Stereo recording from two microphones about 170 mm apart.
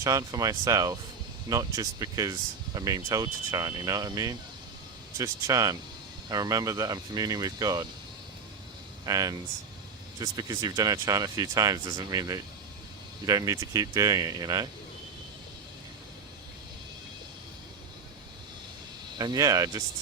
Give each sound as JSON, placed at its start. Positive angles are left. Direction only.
{"t": 0.0, "sound": "speech", "side_deg": -20}
{"t": 9.0, "sound": "speech", "side_deg": -20}
{"t": 19.2, "sound": "speech", "side_deg": -20}